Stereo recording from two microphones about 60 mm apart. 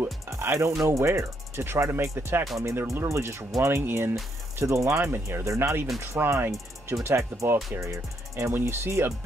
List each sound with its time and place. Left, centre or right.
0.0 s speech: right
4.6 s speech: right
8.5 s speech: right